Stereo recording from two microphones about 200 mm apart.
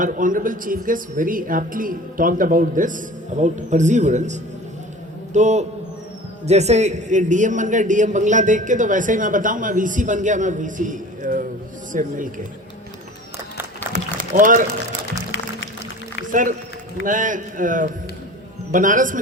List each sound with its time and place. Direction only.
0.0 s a man's voice: 40° right (ahead or behind)
13.9 s a sound: 40° right (ahead or behind)
16.3 s a man's voice: 40° right (ahead or behind)